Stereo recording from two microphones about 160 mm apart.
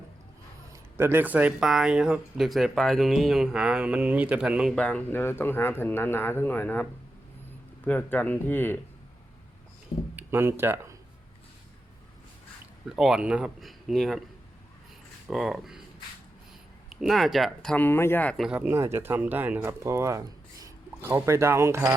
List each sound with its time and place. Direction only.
0.9 s speech: 15° right (ahead or behind)
4.7 s speech: 5° left (ahead or behind)
7.9 s speech: 10° left (ahead or behind)
10.2 s speech: 15° right (ahead or behind)
12.9 s speech: centre (ahead or behind)
15.3 s speech: centre (ahead or behind)
16.9 s speech: centre (ahead or behind)
18.4 s speech: 10° right (ahead or behind)